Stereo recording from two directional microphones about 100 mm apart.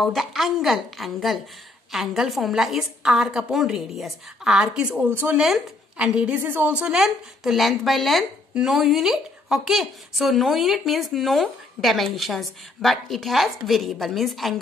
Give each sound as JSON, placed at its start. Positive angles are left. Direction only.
{"t": 0.0, "sound": "a woman's voice", "side_deg": 0}
{"t": 5.4, "sound": "a woman's voice", "side_deg": -5}